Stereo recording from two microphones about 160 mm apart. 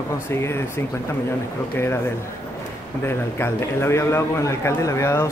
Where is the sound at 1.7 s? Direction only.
15° left (ahead or behind).